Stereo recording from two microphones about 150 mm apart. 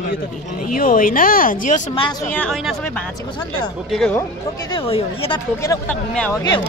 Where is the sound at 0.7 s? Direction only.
70° left (ahead or behind).